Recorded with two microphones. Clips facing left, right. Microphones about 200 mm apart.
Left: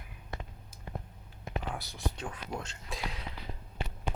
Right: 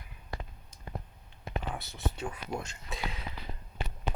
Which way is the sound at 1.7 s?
Centre (ahead or behind).